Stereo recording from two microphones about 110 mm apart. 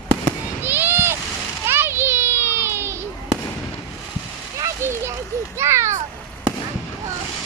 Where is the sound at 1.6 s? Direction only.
20° right (ahead or behind).